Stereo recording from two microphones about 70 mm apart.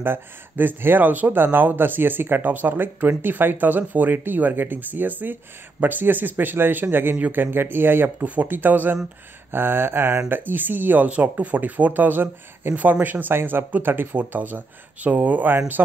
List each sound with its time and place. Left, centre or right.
0.0 s speech: right
9.5 s a sound: right
10.3 s speech: right